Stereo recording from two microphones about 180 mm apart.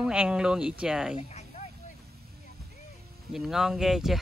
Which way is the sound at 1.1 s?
40° left (ahead or behind).